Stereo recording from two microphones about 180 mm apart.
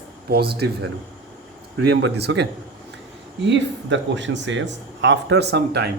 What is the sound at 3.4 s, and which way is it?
Speech, 80° right.